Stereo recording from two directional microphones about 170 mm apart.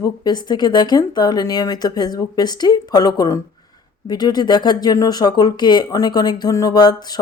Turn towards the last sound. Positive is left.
turn(degrees=25)  # may be behind; listen again after turning